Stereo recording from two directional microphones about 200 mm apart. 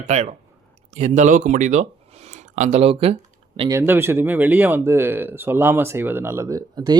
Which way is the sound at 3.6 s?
15° right (ahead or behind).